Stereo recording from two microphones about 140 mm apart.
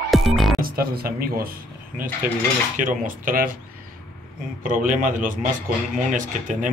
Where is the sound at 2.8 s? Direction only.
70° right (ahead or behind).